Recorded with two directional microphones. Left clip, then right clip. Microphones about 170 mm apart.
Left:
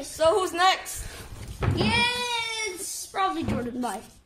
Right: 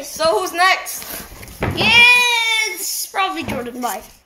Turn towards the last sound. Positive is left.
turn(degrees=20)  # may be behind; listen again after turning